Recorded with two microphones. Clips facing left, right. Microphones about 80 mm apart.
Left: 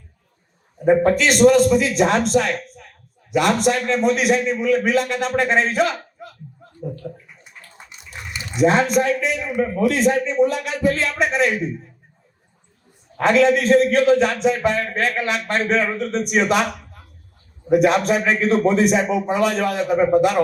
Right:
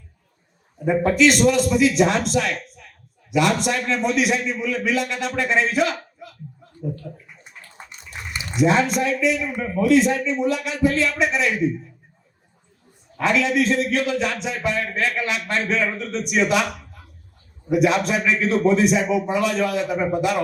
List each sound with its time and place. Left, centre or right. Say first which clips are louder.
0.9 s a man's voice: left 2 dB; left
8.6 s a man's voice: left 3 dB; left
13.1 s a man's voice: left 4 dB; left